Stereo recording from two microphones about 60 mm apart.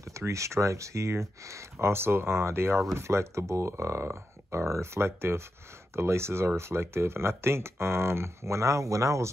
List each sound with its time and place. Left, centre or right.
0.0 s speech: right